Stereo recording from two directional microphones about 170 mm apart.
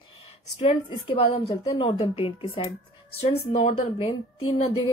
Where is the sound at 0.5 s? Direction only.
35° left (ahead or behind).